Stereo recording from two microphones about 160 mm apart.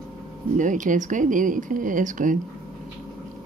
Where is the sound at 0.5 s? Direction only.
50° right (ahead or behind).